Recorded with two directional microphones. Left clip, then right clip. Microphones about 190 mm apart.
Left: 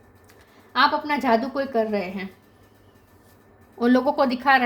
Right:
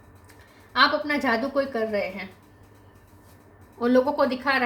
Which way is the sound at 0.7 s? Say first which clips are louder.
Left 1 dB; 45° left (ahead or behind).